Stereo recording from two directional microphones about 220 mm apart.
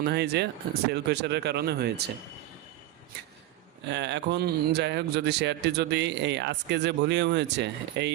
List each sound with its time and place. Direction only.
0.0 s speech: 50° right (ahead or behind)
3.8 s speech: 55° right (ahead or behind)